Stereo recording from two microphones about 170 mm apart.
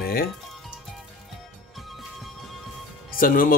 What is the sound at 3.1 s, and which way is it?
Speech, 55° left (ahead or behind).